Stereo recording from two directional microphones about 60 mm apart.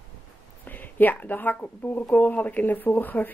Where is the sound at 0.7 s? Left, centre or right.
Left.